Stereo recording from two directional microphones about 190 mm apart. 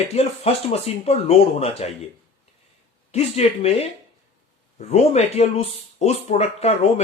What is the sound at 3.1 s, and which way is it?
Speech, 35° left (ahead or behind).